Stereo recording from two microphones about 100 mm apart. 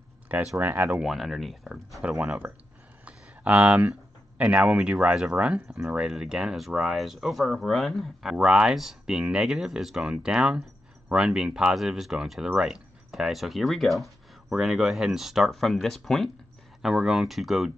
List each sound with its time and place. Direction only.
0.3 s speech: 10° right (ahead or behind)
0.9 s speech: 5° right (ahead or behind)
3.1 s a sound: 15° right (ahead or behind)
4.4 s speech: 15° right (ahead or behind)